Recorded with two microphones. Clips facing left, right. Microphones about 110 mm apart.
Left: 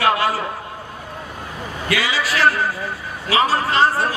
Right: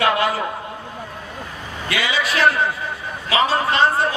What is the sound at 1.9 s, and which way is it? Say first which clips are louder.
Speech: even; 20° right (ahead or behind).